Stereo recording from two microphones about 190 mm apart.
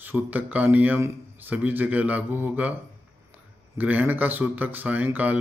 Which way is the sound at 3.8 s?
10° right (ahead or behind).